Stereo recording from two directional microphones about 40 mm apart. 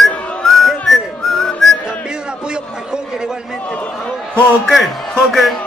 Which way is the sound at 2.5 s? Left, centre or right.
Centre.